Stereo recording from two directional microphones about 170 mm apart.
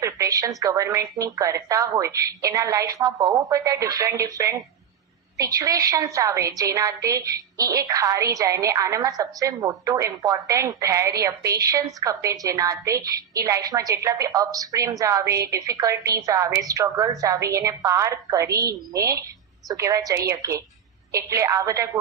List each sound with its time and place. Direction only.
0.0 s a woman's voice: 20° right (ahead or behind)